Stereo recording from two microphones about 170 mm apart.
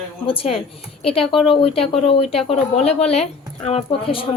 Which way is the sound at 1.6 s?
35° left (ahead or behind).